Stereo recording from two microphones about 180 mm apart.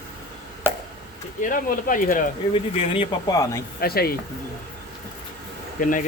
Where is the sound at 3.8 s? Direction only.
60° left (ahead or behind).